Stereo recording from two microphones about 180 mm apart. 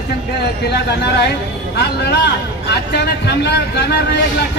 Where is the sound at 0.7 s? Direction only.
65° left (ahead or behind).